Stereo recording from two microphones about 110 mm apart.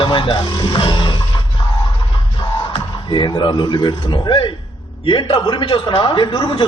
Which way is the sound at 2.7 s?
45° left (ahead or behind).